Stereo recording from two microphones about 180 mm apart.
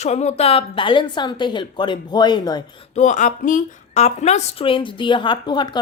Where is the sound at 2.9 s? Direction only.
40° left (ahead or behind).